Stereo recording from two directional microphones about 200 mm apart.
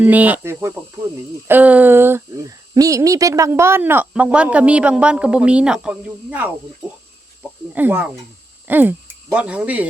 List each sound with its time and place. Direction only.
0.0 s speech: 10° right (ahead or behind)
7.7 s speech: 10° right (ahead or behind)